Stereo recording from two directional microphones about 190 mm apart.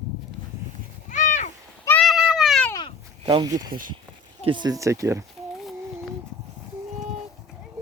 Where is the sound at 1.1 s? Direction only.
40° left (ahead or behind).